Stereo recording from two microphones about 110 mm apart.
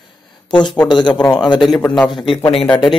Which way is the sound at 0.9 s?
45° left (ahead or behind).